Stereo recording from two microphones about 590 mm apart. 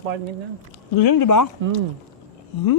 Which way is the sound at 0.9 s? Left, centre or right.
Left.